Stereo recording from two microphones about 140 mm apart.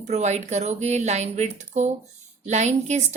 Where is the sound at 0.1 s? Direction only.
55° right (ahead or behind).